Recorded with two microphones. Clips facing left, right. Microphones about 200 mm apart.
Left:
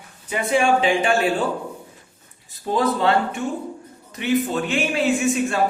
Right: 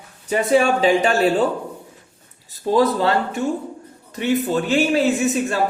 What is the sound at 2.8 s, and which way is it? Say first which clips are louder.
A man's voice: right 2 dB; 35° right (ahead or behind).